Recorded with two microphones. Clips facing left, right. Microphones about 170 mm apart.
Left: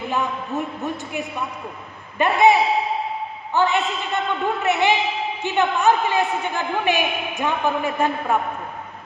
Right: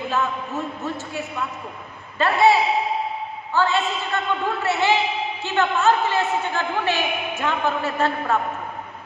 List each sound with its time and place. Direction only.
0.1 s a man's voice: 15° left (ahead or behind)